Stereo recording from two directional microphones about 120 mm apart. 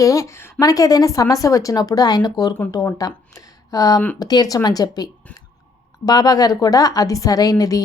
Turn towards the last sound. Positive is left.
turn(degrees=30)  # may be behind; listen again after turning